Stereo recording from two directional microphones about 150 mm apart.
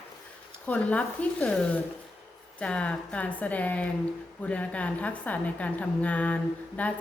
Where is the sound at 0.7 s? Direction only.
10° left (ahead or behind).